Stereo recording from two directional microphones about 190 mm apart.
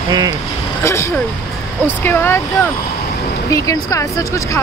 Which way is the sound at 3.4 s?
15° left (ahead or behind).